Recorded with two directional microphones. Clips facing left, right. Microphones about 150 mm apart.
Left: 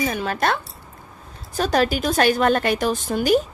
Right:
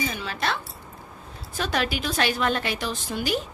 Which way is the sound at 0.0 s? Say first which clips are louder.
Left 6 dB; 50° left (ahead or behind).